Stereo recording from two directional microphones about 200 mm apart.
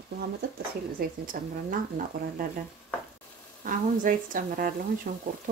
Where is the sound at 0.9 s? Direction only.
45° right (ahead or behind).